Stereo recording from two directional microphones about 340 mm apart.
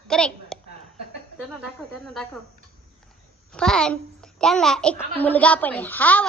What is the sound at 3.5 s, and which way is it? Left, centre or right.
A woman's voice, centre.